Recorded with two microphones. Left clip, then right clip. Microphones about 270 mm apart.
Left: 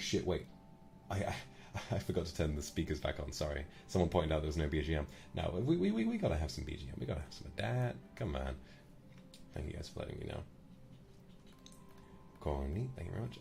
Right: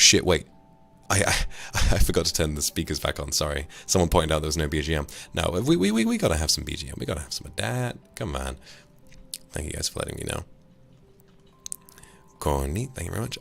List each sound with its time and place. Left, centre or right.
0.1 s speech: right
12.4 s speech: right